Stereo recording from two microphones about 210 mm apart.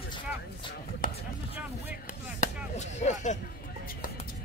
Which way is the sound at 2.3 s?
35° left (ahead or behind).